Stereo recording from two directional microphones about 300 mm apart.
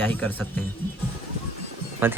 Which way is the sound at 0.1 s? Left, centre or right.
Centre.